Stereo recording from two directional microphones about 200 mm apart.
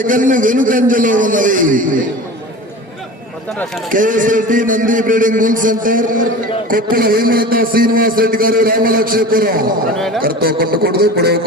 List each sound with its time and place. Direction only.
0.0 s a man's voice: 40° right (ahead or behind)
3.9 s a man's voice: 40° right (ahead or behind)